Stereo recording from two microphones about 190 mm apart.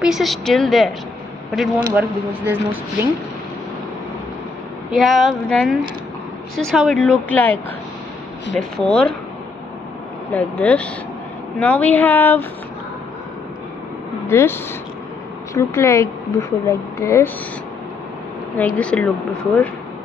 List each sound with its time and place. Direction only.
0.0 s speech: centre (ahead or behind)
2.0 s speech: 10° right (ahead or behind)
4.9 s speech: centre (ahead or behind)
8.5 s speech: 5° left (ahead or behind)
10.3 s a woman's voice: 5° left (ahead or behind)
14.2 s a woman's voice: 10° left (ahead or behind)
18.6 s a woman's voice: 5° left (ahead or behind)